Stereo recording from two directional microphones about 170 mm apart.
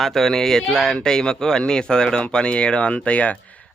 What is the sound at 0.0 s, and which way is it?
Speech, centre (ahead or behind).